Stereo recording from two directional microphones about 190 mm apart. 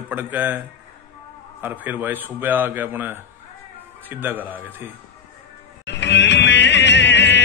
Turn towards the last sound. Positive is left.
turn(degrees=65)  # may be behind; listen again after turning